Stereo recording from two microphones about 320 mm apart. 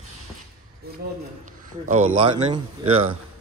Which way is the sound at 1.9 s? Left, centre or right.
Centre.